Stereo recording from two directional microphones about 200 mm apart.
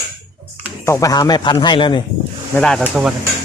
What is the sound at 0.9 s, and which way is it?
Speech, 15° left (ahead or behind).